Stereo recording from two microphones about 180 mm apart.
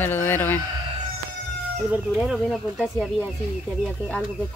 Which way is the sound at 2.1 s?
5° right (ahead or behind).